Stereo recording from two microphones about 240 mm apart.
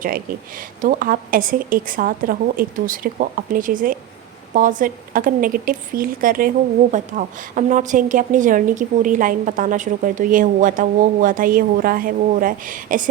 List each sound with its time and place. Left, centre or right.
0.0 s a woman's voice: right